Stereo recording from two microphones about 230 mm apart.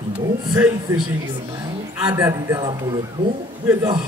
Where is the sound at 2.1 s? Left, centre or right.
Centre.